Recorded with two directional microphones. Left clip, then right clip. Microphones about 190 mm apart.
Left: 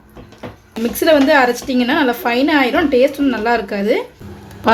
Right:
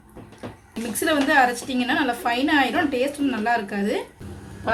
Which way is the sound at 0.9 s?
35° left (ahead or behind).